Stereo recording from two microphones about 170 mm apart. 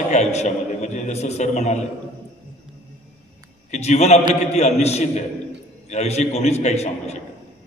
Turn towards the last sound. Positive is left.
turn(degrees=40)  # may be behind; listen again after turning